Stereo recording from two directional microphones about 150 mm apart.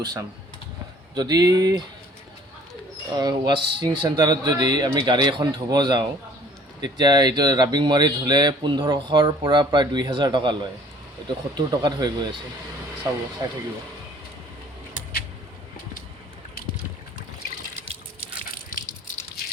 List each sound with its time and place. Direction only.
0.0 s speech: 25° right (ahead or behind)
3.2 s speech: 30° right (ahead or behind)
13.4 s speech: 25° right (ahead or behind)